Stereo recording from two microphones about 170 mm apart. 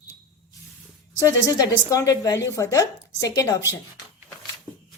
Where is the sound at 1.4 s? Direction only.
25° left (ahead or behind).